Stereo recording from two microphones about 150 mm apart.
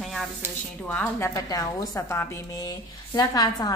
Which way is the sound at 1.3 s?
25° left (ahead or behind).